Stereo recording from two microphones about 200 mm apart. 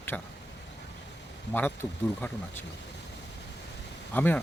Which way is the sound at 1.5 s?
10° left (ahead or behind).